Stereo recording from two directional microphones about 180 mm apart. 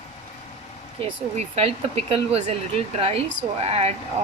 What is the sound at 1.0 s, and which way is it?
Speech, 35° right (ahead or behind).